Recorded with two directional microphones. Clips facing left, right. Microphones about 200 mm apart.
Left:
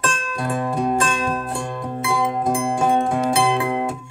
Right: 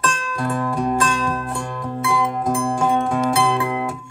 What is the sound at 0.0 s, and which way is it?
Music, 25° left (ahead or behind).